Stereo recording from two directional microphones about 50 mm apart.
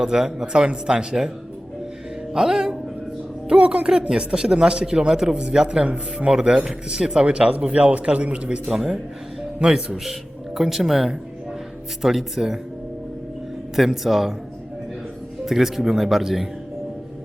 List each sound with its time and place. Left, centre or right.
0.0 s speech: centre
2.3 s a man's voice: centre
8.6 s speech: centre
13.7 s speech: centre
15.4 s speech: centre